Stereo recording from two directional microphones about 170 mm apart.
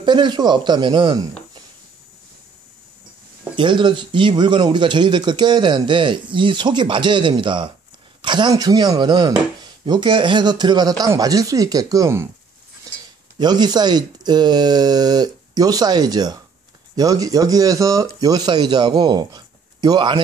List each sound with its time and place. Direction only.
0.0 s speech: 25° right (ahead or behind)
3.5 s speech: 25° right (ahead or behind)
12.9 s a sound: 20° right (ahead or behind)
13.4 s speech: 25° right (ahead or behind)